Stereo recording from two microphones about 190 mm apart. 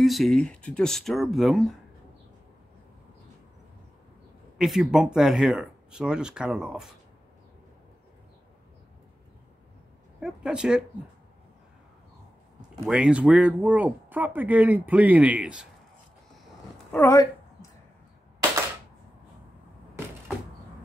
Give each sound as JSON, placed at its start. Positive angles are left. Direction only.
{"t": 0.0, "sound": "speech", "side_deg": 0}
{"t": 4.6, "sound": "speech", "side_deg": 0}
{"t": 10.2, "sound": "speech", "side_deg": -5}
{"t": 12.6, "sound": "speech", "side_deg": -5}
{"t": 16.9, "sound": "a sound", "side_deg": 15}